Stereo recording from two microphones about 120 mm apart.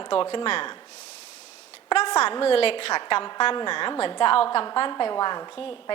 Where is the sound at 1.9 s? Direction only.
55° left (ahead or behind).